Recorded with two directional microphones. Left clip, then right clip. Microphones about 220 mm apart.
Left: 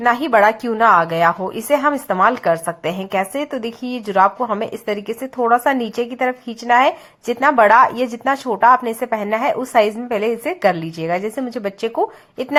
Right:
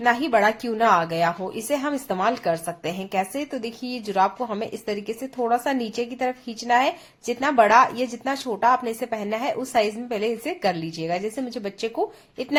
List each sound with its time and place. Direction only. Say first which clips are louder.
0.0 s speech: left 6 dB; 20° left (ahead or behind)